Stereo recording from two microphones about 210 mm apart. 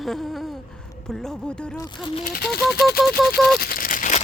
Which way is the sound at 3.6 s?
45° left (ahead or behind).